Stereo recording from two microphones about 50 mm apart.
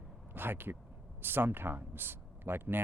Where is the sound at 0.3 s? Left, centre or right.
Right.